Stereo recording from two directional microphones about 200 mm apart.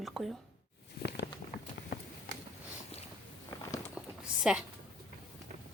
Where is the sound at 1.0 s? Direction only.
50° left (ahead or behind).